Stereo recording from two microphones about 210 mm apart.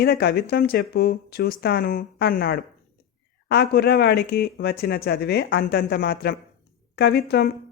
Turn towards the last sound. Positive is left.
turn(degrees=50)  # may be behind; listen again after turning